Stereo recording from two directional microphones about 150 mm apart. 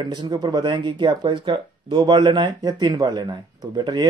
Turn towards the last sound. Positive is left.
turn(degrees=-30)  # may be behind; listen again after turning